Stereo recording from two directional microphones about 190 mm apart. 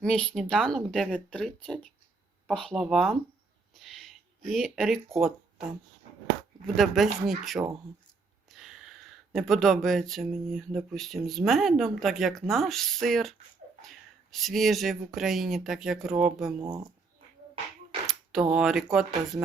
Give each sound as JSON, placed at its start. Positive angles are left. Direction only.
{"t": 0.0, "sound": "speech", "side_deg": 5}
{"t": 3.8, "sound": "a sound", "side_deg": 0}
{"t": 5.1, "sound": "speech", "side_deg": 0}
{"t": 6.7, "sound": "speech", "side_deg": 0}
{"t": 16.6, "sound": "speech", "side_deg": -15}
{"t": 18.0, "sound": "a sound", "side_deg": 0}
{"t": 18.5, "sound": "speech", "side_deg": 0}